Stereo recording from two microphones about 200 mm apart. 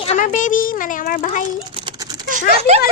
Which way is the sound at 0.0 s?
35° left (ahead or behind).